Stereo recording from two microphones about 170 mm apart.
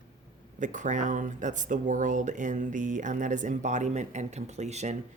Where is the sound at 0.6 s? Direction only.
50° right (ahead or behind).